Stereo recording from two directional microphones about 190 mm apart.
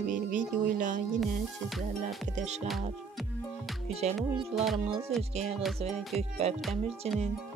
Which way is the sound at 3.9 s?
30° right (ahead or behind).